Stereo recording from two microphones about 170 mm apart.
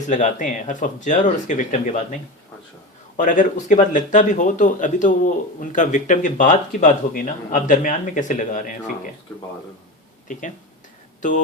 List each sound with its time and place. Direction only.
0.1 s speech: 45° left (ahead or behind)
3.2 s speech: 50° left (ahead or behind)
10.3 s speech: 45° left (ahead or behind)